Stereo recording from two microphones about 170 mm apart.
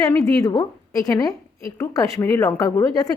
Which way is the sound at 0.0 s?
20° left (ahead or behind).